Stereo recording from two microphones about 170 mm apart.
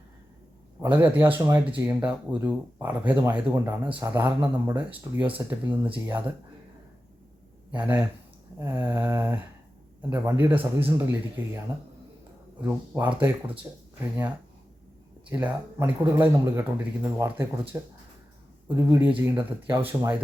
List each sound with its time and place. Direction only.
0.8 s speech: 15° right (ahead or behind)
7.7 s speech: 10° right (ahead or behind)
12.6 s speech: 10° right (ahead or behind)
15.3 s speech: 10° right (ahead or behind)